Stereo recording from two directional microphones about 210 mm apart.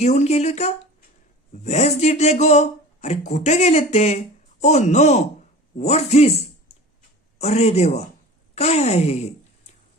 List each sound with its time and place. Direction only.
0.0 s speech: 30° left (ahead or behind)